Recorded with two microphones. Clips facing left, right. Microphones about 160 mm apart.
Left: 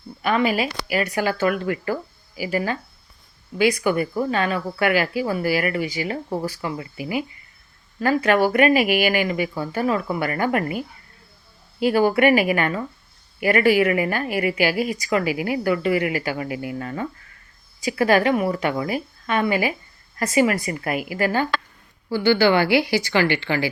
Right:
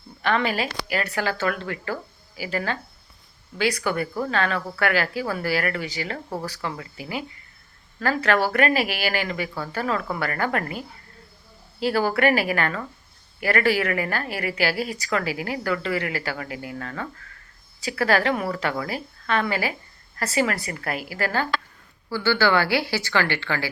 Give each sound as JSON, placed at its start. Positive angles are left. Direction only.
{"t": 0.2, "sound": "speech", "side_deg": 10}
{"t": 3.8, "sound": "speech", "side_deg": 15}